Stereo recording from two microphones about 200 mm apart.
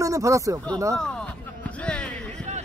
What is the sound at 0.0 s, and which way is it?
Speech, 15° right (ahead or behind).